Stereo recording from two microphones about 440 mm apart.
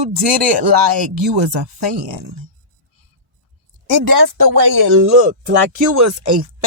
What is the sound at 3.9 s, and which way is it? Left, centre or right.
Speech, right.